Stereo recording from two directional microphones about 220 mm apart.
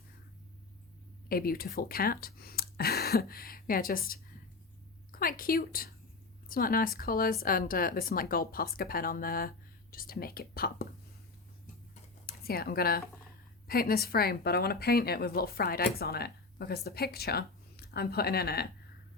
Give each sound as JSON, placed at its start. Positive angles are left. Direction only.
{"t": 1.3, "sound": "speech", "side_deg": 40}
{"t": 12.2, "sound": "speech", "side_deg": 45}